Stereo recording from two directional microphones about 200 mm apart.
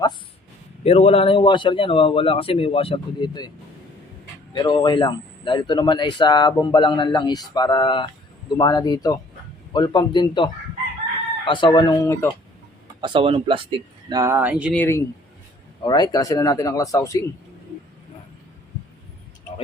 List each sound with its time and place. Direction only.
0.9 s speech: 30° left (ahead or behind)
4.5 s speech: 20° left (ahead or behind)
13.0 s speech: 25° right (ahead or behind); by 14.8 s 5° right (ahead or behind)
14.8 s speech: 15° left (ahead or behind)